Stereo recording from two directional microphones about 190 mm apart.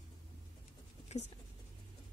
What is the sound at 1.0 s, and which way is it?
Writing, 35° left (ahead or behind).